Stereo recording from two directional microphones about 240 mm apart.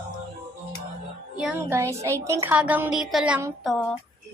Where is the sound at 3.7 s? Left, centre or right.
Centre.